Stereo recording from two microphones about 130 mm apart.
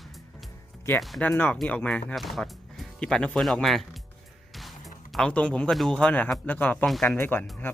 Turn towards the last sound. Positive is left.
turn(degrees=20)  # may be behind; listen again after turning